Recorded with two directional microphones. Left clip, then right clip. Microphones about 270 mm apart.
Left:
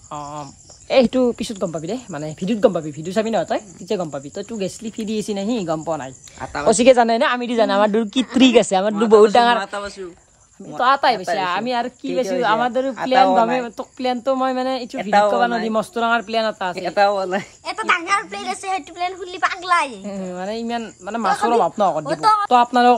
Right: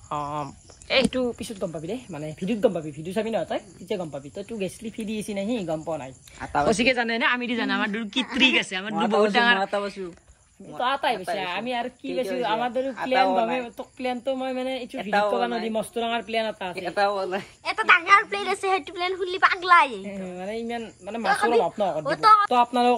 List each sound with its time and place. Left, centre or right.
0.1 s speech: centre
0.9 s speech: centre
9.6 s speech: centre
10.8 s speech: centre
12.8 s speech: left
13.7 s speech: centre
15.0 s speech: left
15.7 s speech: centre
16.7 s speech: left
17.6 s a woman's voice: centre
20.1 s speech: centre